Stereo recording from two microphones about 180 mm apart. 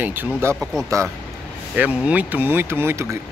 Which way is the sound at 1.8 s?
5° right (ahead or behind).